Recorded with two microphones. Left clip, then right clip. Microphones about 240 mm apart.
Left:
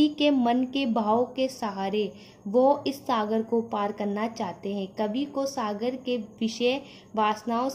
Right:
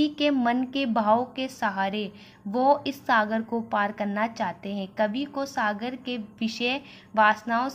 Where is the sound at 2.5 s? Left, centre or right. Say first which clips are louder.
Even; right.